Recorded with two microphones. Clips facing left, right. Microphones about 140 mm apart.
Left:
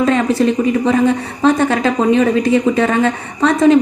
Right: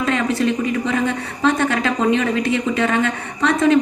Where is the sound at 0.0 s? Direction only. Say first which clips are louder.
Left 5 dB; 35° left (ahead or behind).